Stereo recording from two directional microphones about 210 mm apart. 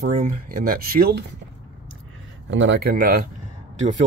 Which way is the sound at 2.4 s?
60° right (ahead or behind).